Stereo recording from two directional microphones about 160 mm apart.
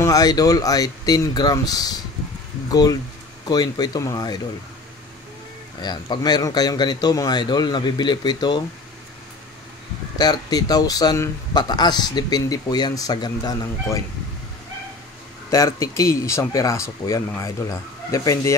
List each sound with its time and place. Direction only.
0.0 s speech: 25° left (ahead or behind)
5.8 s speech: 25° left (ahead or behind)
10.1 s speech: 25° left (ahead or behind)
15.5 s speech: 20° left (ahead or behind)